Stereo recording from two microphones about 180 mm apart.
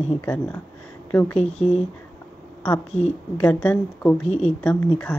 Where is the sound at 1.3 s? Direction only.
35° left (ahead or behind).